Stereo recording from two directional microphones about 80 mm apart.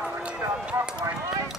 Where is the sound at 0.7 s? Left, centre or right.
Centre.